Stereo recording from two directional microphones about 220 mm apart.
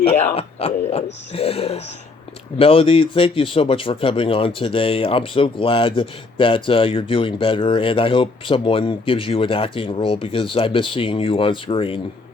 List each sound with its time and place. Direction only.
0.3 s speech: 25° left (ahead or behind)